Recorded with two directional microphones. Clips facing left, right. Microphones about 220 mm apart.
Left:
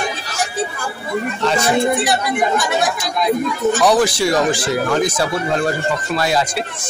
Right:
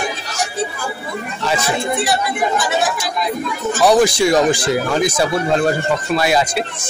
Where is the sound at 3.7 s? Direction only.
10° right (ahead or behind).